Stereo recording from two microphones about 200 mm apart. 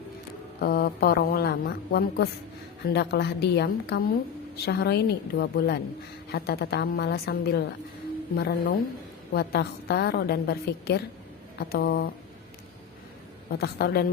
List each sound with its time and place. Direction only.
0.6 s a woman's voice: 50° left (ahead or behind)
13.5 s a woman's voice: 50° left (ahead or behind)